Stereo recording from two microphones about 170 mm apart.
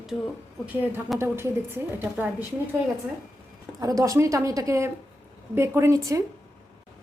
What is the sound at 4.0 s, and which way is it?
A woman's voice, 20° right (ahead or behind).